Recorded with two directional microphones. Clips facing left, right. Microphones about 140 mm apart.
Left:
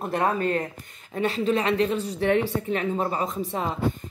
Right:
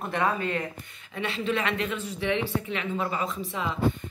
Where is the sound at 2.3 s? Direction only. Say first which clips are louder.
Left 5 dB; 45° left (ahead or behind).